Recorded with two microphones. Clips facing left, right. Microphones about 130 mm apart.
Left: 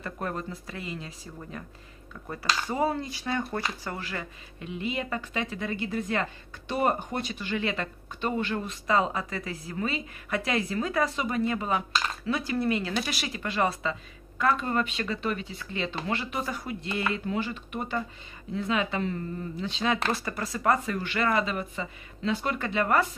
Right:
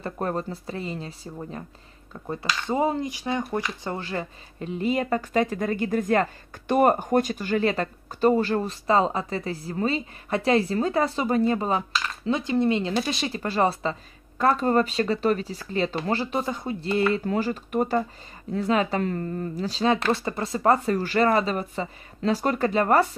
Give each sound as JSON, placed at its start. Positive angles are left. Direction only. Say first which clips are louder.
{"t": 0.0, "sound": "speech", "louder": "right 5 dB", "side_deg": -35}
{"t": 3.8, "sound": "speech", "louder": "right 5 dB", "side_deg": -30}
{"t": 12.3, "sound": "speech", "louder": "right 5 dB", "side_deg": -25}